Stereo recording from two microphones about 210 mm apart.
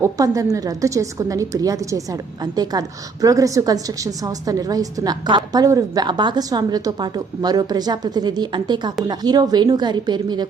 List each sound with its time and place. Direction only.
0.0 s a woman's voice: 15° right (ahead or behind)